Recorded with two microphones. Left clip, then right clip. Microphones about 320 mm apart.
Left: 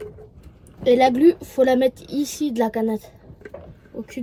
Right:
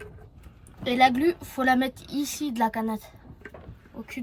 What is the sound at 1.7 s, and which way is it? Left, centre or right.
Speech, centre.